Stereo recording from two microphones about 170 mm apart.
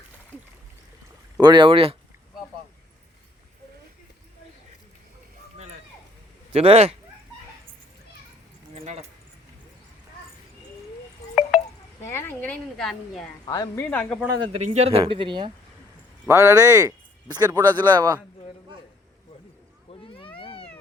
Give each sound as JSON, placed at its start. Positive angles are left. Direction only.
{"t": 1.4, "sound": "speech", "side_deg": -25}
{"t": 6.5, "sound": "speech", "side_deg": -35}
{"t": 8.7, "sound": "keys jangling", "side_deg": -40}
{"t": 11.2, "sound": "a sound", "side_deg": 20}
{"t": 12.1, "sound": "a woman's voice", "side_deg": 15}
{"t": 13.4, "sound": "a woman's voice", "side_deg": 25}
{"t": 13.8, "sound": "speech", "side_deg": 10}
{"t": 14.6, "sound": "a man's voice", "side_deg": -40}
{"t": 16.2, "sound": "speech", "side_deg": -15}
{"t": 19.9, "sound": "cat", "side_deg": 30}